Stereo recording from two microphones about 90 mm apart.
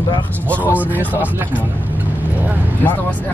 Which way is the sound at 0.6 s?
20° right (ahead or behind).